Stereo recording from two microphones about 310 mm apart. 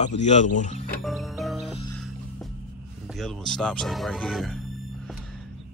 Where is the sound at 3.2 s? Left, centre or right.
Centre.